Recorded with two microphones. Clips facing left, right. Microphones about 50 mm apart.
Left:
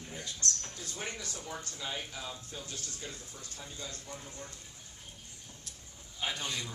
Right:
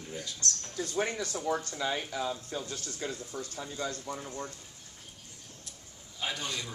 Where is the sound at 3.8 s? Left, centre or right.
Right.